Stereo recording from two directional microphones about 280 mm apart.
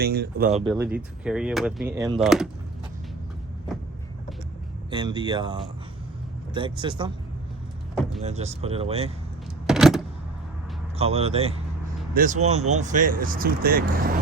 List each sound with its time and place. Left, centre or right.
0.0 s speech: right
0.7 s speech: centre
1.9 s speech: centre
2.2 s speech: centre
4.9 s speech: centre
8.2 s speech: right
9.6 s a sound: centre
10.9 s speech: right